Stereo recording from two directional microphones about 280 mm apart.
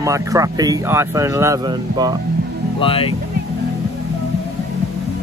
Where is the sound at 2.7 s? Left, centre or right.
Centre.